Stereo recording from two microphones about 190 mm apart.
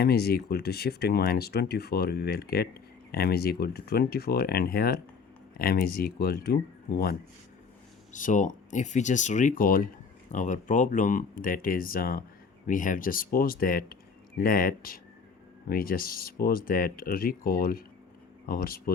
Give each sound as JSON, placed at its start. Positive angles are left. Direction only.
{"t": 0.0, "sound": "speech", "side_deg": 55}
{"t": 8.1, "sound": "speech", "side_deg": 40}